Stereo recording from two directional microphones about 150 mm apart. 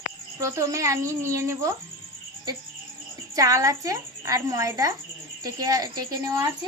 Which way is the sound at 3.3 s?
20° right (ahead or behind).